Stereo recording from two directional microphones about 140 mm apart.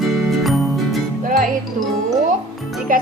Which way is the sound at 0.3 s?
Centre (ahead or behind).